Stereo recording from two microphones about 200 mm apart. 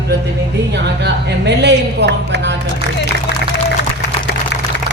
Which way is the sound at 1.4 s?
60° right (ahead or behind).